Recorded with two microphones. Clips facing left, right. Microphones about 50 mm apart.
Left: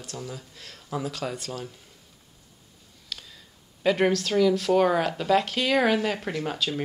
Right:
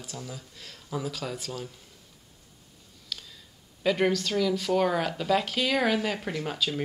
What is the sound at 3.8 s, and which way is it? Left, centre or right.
Speech, centre.